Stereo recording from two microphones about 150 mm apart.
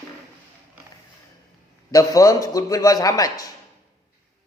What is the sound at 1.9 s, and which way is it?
A man's voice, 25° left (ahead or behind).